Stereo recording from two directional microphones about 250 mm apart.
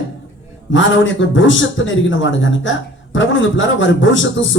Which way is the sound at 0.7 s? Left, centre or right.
Left.